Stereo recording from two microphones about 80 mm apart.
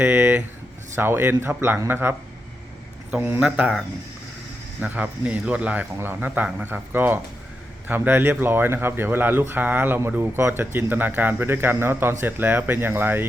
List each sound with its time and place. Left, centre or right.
0.0 s speech: right
3.2 s speech: right
4.8 s speech: centre